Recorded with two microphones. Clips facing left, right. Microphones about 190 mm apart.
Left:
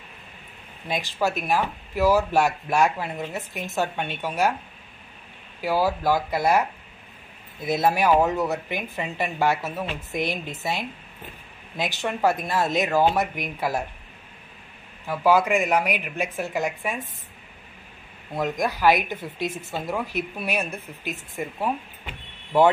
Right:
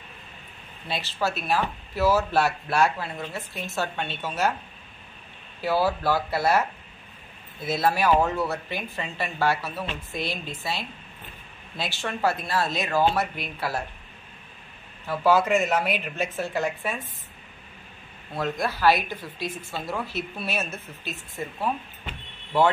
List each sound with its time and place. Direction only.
0.8 s speech: 15° left (ahead or behind)
5.6 s speech: 10° left (ahead or behind)
15.0 s speech: 15° left (ahead or behind)
18.3 s speech: 15° left (ahead or behind)